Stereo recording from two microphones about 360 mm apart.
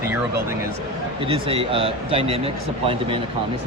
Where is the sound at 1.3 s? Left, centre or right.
Centre.